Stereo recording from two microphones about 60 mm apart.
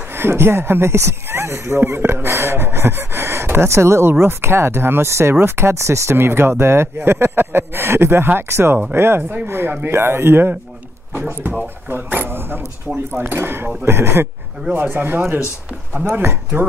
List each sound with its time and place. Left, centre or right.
0.1 s speech: right
6.1 s speech: right
14.7 s speech: right